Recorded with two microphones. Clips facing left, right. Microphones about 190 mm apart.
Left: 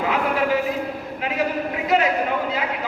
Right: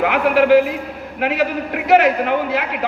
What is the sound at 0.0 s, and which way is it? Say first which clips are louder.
A man's voice: right 6 dB; 75° right (ahead or behind).